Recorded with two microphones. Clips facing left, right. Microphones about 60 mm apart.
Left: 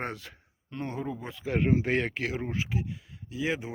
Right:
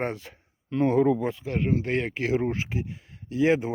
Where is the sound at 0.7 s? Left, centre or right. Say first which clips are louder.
Right 13 dB; right.